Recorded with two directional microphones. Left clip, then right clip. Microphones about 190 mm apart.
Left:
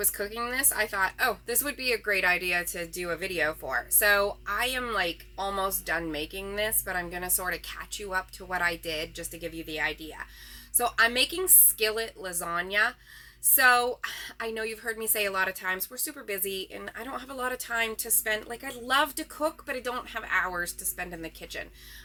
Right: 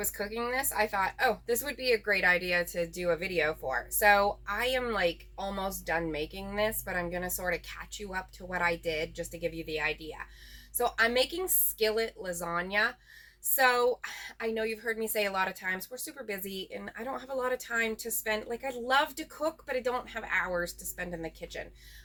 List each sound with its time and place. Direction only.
0.0 s a woman's voice: 15° left (ahead or behind)